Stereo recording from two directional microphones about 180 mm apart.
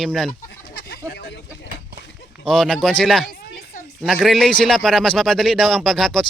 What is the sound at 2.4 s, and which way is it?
A man's voice, 5° left (ahead or behind).